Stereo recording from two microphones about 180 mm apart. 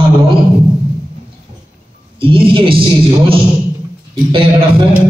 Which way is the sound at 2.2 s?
30° right (ahead or behind).